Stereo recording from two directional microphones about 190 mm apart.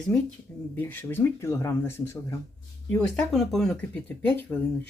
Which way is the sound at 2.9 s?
5° left (ahead or behind).